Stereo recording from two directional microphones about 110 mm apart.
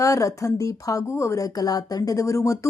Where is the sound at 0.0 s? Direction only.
30° left (ahead or behind).